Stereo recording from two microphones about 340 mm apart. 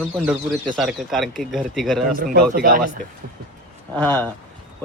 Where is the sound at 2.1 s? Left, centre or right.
Right.